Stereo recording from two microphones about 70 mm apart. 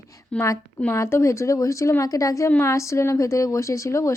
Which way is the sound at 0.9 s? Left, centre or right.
Left.